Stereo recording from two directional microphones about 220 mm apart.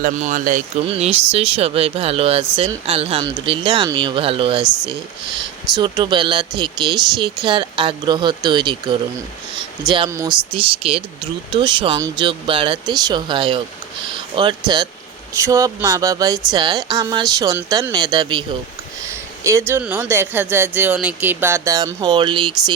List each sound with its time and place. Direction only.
0.0 s speech: 35° right (ahead or behind)
4.6 s speech: 5° right (ahead or behind)
5.7 s speech: 20° right (ahead or behind)
15.3 s speech: 15° right (ahead or behind)
19.5 s speech: 10° right (ahead or behind)